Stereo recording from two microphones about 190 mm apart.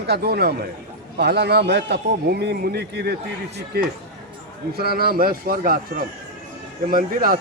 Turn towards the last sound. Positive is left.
turn(degrees=-50)  # may be behind; listen again after turning